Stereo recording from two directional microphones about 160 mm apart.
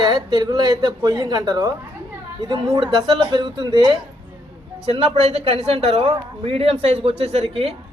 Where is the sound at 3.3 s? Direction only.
30° right (ahead or behind).